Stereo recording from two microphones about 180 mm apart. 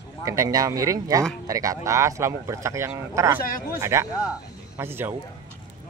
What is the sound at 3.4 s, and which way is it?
Speech, 55° left (ahead or behind).